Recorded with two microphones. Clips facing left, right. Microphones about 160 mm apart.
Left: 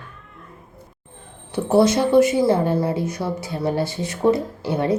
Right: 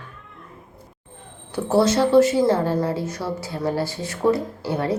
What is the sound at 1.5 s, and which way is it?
A woman's voice, 20° left (ahead or behind).